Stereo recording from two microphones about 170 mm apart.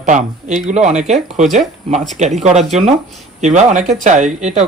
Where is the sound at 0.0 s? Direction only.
45° right (ahead or behind).